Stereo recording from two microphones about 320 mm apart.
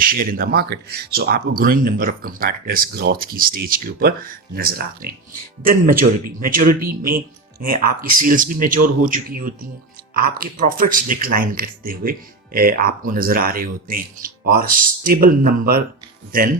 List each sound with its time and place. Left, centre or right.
0.0 s speech: right
8.0 s speech: right
8.3 s speech: right